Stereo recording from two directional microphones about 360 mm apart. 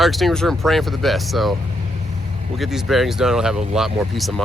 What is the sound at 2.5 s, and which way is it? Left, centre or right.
Speech, centre.